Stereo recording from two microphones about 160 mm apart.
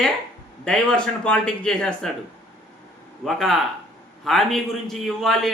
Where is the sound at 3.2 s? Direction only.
Centre (ahead or behind).